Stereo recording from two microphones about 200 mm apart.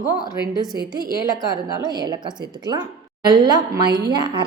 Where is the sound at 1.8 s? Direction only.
20° right (ahead or behind).